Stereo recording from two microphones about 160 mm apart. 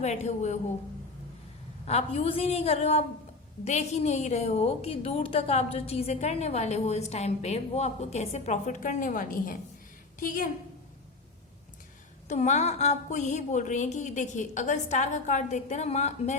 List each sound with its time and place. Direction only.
0.0 s a woman's voice: 45° left (ahead or behind)
1.9 s a woman's voice: 40° left (ahead or behind); by 10.5 s 60° left (ahead or behind)
12.3 s a woman's voice: 45° left (ahead or behind)